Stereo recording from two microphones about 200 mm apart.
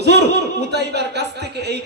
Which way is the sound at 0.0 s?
55° right (ahead or behind).